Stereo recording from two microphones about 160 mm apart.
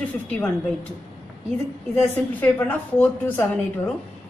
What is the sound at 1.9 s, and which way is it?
A woman's voice, 10° left (ahead or behind).